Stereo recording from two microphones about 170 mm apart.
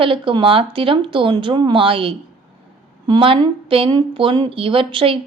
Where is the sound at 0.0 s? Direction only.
30° right (ahead or behind).